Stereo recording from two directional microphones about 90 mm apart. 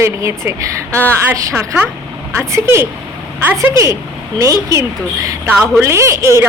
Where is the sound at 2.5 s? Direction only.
30° right (ahead or behind).